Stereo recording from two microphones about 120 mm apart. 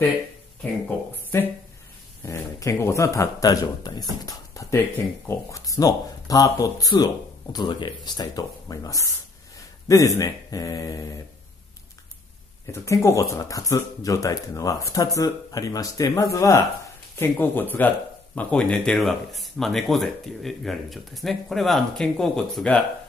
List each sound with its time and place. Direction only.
1.3 s speech: 20° left (ahead or behind)
12.7 s speech: 25° left (ahead or behind); by 22.8 s 5° left (ahead or behind)